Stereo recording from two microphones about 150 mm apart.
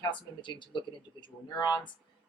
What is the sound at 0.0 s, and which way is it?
Speech, 30° left (ahead or behind).